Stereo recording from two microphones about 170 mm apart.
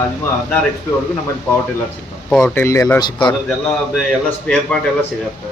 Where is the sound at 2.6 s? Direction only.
15° left (ahead or behind).